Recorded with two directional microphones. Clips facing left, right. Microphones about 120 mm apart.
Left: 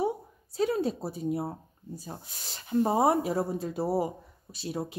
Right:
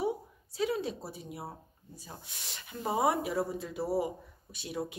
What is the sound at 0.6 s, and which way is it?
Speech, 45° left (ahead or behind).